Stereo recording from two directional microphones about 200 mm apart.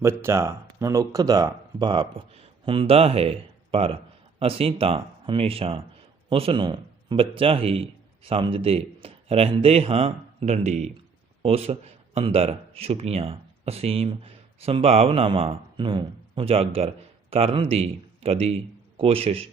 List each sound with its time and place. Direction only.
0.0 s a man's voice: 15° right (ahead or behind); by 19.5 s 30° right (ahead or behind)